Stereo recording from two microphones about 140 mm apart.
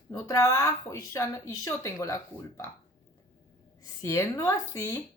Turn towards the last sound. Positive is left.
turn(degrees=20)  # may be behind; listen again after turning